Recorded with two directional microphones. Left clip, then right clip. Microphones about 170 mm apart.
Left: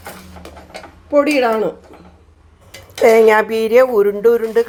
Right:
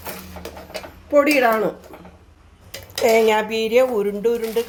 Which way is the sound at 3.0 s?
35° left (ahead or behind).